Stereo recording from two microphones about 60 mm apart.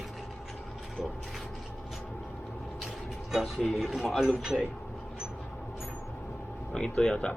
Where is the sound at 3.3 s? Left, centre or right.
Centre.